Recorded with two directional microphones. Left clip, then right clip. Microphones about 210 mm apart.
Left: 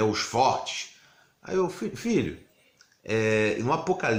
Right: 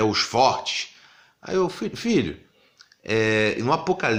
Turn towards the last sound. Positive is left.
turn(degrees=-35)  # may be behind; listen again after turning